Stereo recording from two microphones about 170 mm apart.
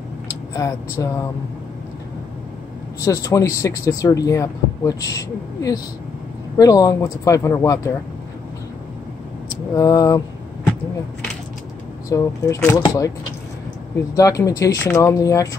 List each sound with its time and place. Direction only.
0.6 s speech: 20° left (ahead or behind)
3.0 s speech: 20° left (ahead or behind)
9.8 s speech: 20° left (ahead or behind)
12.1 s speech: 20° left (ahead or behind)
14.1 s speech: 20° left (ahead or behind)